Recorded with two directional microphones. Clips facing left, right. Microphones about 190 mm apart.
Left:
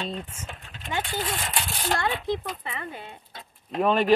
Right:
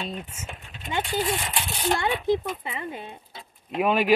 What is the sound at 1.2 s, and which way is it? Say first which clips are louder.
Speech: right 3 dB; centre (ahead or behind).